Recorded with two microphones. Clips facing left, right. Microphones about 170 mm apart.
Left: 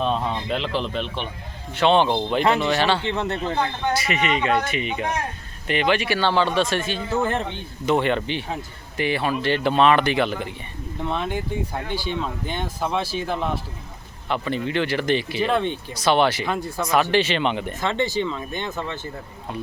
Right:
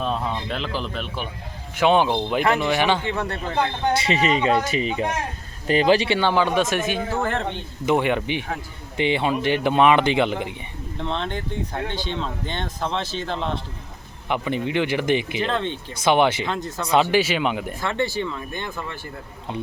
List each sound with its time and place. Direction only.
0.0 s speech: centre (ahead or behind)
3.1 s speech: 25° left (ahead or behind)
4.0 s speech: 30° right (ahead or behind)
6.1 s speech: 15° right (ahead or behind)
7.1 s speech: 20° left (ahead or behind)
7.9 s speech: 10° right (ahead or behind)
11.0 s speech: 10° left (ahead or behind)
14.3 s speech: 15° right (ahead or behind)
15.4 s speech: 10° left (ahead or behind)
16.0 s speech: 15° right (ahead or behind)
16.5 s speech: 10° left (ahead or behind)
17.0 s speech: 10° right (ahead or behind)
17.7 s speech: 20° left (ahead or behind)